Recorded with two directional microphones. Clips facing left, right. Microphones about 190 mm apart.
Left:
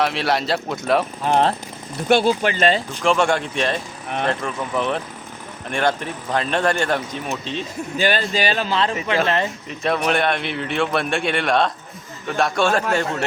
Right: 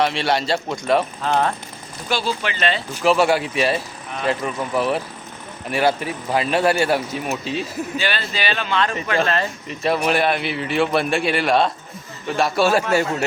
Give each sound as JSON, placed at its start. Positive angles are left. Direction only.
{"t": 0.0, "sound": "a man's voice", "side_deg": 0}
{"t": 2.0, "sound": "speech", "side_deg": 55}
{"t": 2.4, "sound": "speech", "side_deg": 45}
{"t": 2.9, "sound": "a man's voice", "side_deg": -5}
{"t": 7.9, "sound": "speech", "side_deg": 45}
{"t": 9.2, "sound": "speech", "side_deg": 20}
{"t": 9.6, "sound": "a man's voice", "side_deg": 0}